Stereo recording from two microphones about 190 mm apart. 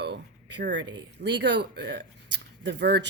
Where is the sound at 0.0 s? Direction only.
65° right (ahead or behind).